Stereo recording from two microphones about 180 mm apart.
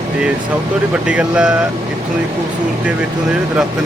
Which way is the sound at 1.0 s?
5° right (ahead or behind).